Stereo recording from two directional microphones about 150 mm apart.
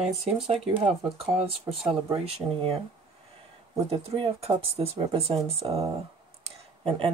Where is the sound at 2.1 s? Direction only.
40° right (ahead or behind).